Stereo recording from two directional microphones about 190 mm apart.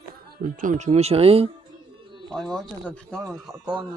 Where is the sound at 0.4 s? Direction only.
45° right (ahead or behind).